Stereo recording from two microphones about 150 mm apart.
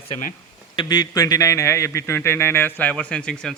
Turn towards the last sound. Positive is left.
turn(degrees=5)  # may be behind; listen again after turning